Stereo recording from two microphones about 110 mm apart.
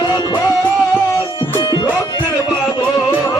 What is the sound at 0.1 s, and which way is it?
Music, 40° left (ahead or behind).